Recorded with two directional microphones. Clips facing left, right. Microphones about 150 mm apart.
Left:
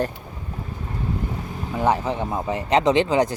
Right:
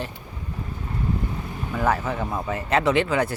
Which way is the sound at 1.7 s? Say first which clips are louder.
Left 2 dB; 20° left (ahead or behind).